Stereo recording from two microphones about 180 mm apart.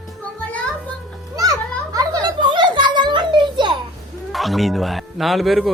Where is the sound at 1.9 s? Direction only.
20° right (ahead or behind).